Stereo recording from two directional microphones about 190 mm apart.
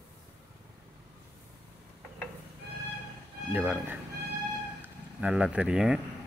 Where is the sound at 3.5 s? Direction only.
10° right (ahead or behind).